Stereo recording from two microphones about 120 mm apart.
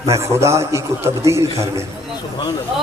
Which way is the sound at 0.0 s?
25° right (ahead or behind).